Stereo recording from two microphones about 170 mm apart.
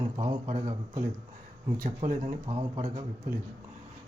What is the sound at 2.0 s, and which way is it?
Speech, 50° right (ahead or behind).